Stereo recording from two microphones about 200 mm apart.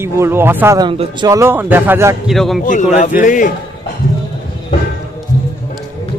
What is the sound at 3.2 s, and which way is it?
Speech, 40° left (ahead or behind).